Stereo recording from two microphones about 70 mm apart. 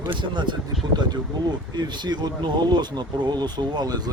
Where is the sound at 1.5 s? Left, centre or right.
Right.